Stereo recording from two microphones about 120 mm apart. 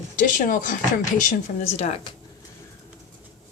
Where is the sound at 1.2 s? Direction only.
80° left.